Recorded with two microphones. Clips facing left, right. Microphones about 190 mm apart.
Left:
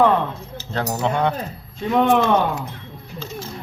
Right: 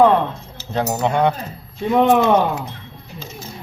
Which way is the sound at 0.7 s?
15° right (ahead or behind).